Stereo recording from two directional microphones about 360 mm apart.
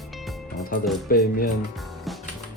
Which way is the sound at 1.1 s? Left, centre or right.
Left.